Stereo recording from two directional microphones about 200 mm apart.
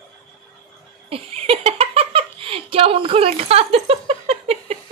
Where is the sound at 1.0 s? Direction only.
30° right (ahead or behind).